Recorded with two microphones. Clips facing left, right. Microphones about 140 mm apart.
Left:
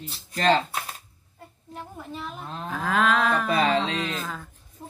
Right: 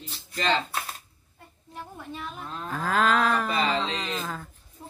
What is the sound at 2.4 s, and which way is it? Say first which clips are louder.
Livestock: left 1 dB; 25° left (ahead or behind).